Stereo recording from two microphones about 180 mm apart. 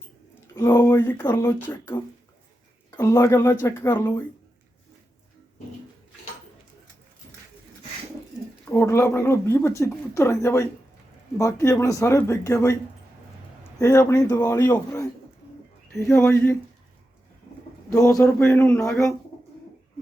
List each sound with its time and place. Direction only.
0.5 s speech: 15° left (ahead or behind)
2.9 s speech: 15° left (ahead or behind)
8.7 s speech: 15° left (ahead or behind)
17.9 s speech: 15° left (ahead or behind)